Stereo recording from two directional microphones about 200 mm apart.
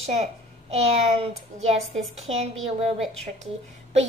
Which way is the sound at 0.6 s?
30° right (ahead or behind).